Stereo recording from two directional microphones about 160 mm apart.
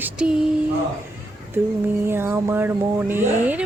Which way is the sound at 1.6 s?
15° right (ahead or behind).